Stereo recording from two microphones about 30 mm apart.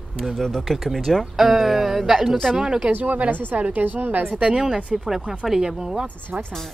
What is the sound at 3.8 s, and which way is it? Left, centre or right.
Speech, right.